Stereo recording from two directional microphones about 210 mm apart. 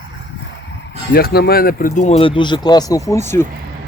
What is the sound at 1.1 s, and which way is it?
Speech, 50° left (ahead or behind).